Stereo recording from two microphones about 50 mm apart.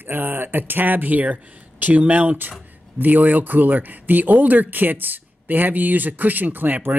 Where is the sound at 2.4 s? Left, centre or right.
Right.